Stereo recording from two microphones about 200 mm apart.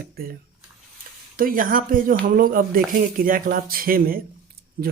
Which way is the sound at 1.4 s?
45° right (ahead or behind).